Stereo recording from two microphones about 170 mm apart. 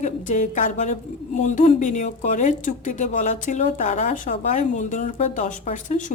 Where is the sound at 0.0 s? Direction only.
45° left (ahead or behind).